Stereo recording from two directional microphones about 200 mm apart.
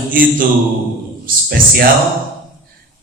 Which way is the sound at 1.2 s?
50° right (ahead or behind).